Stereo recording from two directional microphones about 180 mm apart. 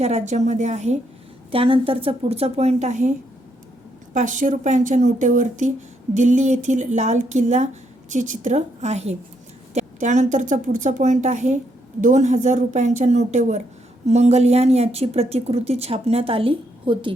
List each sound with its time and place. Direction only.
0.0 s speech: 40° right (ahead or behind)
1.5 s a woman's voice: 30° right (ahead or behind)